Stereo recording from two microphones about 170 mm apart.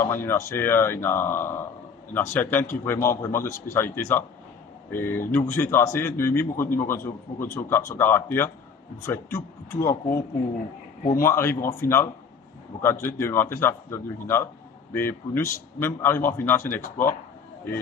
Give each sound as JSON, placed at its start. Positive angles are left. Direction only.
{"t": 0.0, "sound": "a man's voice", "side_deg": 15}
{"t": 11.2, "sound": "a man's voice", "side_deg": 15}